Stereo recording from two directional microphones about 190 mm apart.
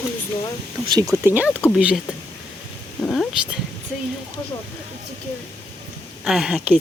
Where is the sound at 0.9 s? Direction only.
20° right (ahead or behind); by 2.0 s 5° right (ahead or behind).